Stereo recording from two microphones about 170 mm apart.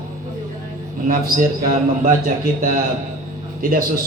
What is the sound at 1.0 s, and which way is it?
A man's voice, 55° right (ahead or behind).